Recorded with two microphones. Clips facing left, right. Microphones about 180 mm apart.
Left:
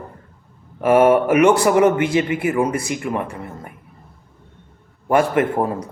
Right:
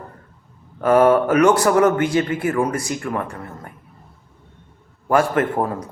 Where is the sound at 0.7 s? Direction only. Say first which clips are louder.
Left 1 dB; 15° left (ahead or behind).